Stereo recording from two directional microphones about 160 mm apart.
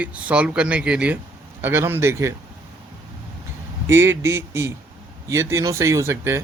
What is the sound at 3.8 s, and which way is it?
Speech, 15° right (ahead or behind).